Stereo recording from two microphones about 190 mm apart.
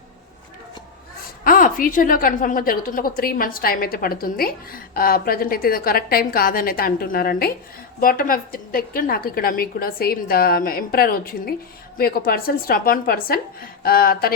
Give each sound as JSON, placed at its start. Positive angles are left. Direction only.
{"t": 1.5, "sound": "a woman's voice", "side_deg": 45}